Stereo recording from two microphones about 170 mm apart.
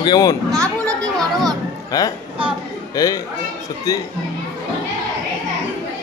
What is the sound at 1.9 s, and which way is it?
A man's voice, 20° left (ahead or behind).